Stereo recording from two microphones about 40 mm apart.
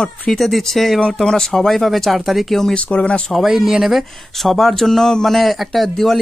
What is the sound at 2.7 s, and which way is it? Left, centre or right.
Speech, left.